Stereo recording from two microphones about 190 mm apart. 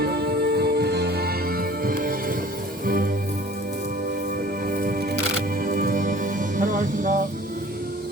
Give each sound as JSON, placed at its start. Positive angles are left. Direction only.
{"t": 0.0, "sound": "music", "side_deg": -55}
{"t": 4.6, "sound": "music", "side_deg": -50}